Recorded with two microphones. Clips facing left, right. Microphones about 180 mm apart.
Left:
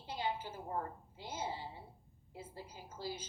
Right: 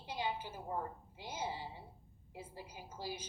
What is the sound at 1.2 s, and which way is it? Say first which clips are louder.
A woman's voice: even; 10° right (ahead or behind).